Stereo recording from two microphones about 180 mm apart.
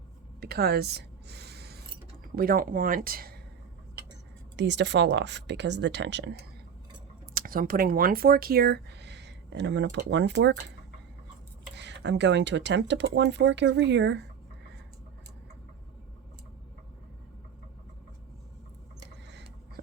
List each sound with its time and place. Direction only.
0.3 s a sound: 60° right (ahead or behind)
2.3 s speech: 55° right (ahead or behind)
4.5 s speech: 75° right (ahead or behind)
7.3 s speech: 50° right (ahead or behind); by 10.6 s 75° right (ahead or behind)
11.7 s speech: 75° right (ahead or behind)
19.3 s vehicle: 70° right (ahead or behind)